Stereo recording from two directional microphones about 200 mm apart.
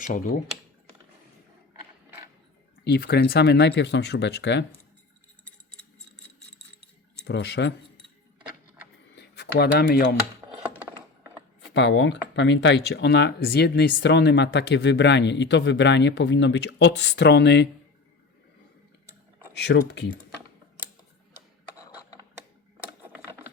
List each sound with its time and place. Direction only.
0.0 s speech: 40° left (ahead or behind)
1.8 s mechanisms: 10° right (ahead or behind)
2.8 s speech: 55° left (ahead or behind)
7.3 s speech: 60° left (ahead or behind)
9.1 s speech: 55° left (ahead or behind)
11.7 s speech: 60° left (ahead or behind)
19.5 s speech: 60° left (ahead or behind)